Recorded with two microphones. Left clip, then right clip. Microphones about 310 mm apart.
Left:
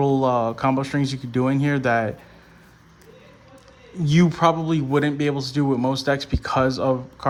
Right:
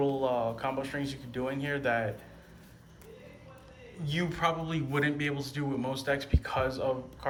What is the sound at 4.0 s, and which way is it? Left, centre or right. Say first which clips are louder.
A man's voice: left 11 dB; left.